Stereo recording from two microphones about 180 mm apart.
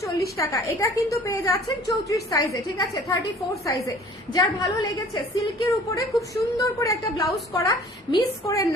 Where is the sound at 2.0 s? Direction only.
20° left (ahead or behind).